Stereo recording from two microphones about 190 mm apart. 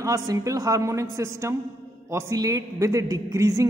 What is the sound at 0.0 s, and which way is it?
A woman's voice, 15° right (ahead or behind).